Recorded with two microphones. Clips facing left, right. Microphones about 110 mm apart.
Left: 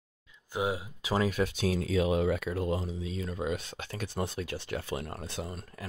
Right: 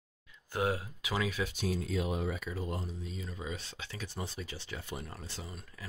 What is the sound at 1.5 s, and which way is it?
Speech, 90° left.